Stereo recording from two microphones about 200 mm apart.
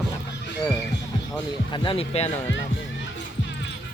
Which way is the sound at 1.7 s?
25° left (ahead or behind).